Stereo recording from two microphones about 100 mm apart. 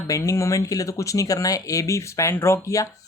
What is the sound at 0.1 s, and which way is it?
Speech, 30° left (ahead or behind).